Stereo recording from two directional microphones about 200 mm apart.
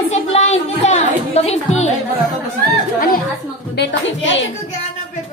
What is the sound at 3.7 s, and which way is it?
Speech, 60° left (ahead or behind).